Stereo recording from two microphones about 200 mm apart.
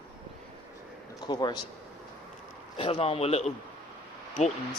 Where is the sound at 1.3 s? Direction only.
20° left (ahead or behind).